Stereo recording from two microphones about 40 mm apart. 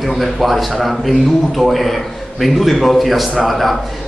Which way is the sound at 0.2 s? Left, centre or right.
Centre.